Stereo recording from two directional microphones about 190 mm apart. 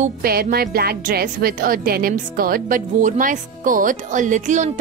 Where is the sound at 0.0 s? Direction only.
50° right (ahead or behind).